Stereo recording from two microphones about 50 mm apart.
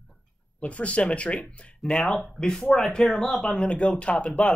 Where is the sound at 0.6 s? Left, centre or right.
Left; by 3.5 s centre.